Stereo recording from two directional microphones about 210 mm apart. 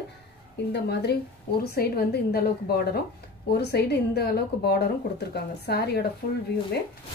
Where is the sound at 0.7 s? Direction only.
50° left (ahead or behind).